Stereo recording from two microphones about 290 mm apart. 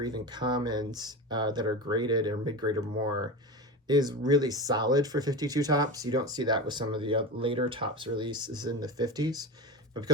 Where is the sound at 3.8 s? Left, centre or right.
Centre.